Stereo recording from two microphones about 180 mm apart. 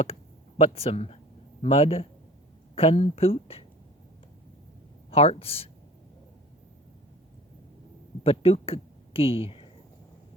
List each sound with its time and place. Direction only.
0.6 s speech: 35° left (ahead or behind)
5.1 s speech: 30° left (ahead or behind)
8.2 s speech: 30° left (ahead or behind)